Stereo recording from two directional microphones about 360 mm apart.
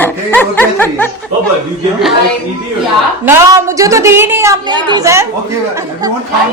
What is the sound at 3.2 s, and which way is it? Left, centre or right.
A woman's voice, centre.